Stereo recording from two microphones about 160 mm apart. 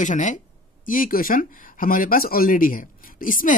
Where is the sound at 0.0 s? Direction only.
50° left (ahead or behind).